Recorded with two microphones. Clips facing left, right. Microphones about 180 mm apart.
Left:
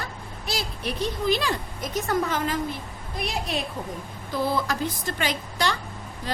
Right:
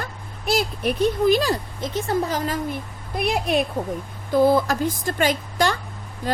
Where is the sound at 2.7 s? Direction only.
55° right (ahead or behind).